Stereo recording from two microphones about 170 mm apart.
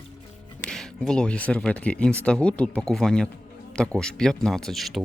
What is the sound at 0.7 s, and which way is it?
Speech, 5° left (ahead or behind).